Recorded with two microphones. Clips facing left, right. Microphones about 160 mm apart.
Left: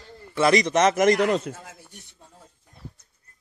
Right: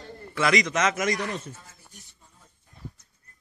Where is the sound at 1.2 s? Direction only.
90° left; by 2.5 s 60° left (ahead or behind).